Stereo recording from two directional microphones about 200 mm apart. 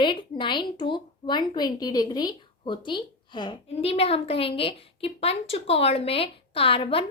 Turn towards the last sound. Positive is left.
turn(degrees=25)  # may be behind; listen again after turning